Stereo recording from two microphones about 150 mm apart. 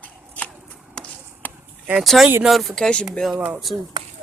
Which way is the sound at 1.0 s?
10° left (ahead or behind).